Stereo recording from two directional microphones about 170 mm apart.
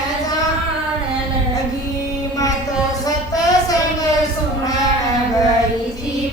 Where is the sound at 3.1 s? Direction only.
20° left (ahead or behind).